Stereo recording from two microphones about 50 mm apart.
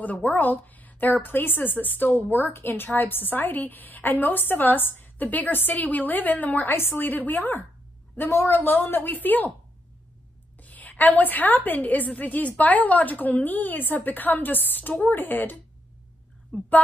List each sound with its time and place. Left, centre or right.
0.0 s a woman's voice: left
8.3 s a woman's voice: left
8.5 s a woman's voice: left
10.6 s a woman's voice: left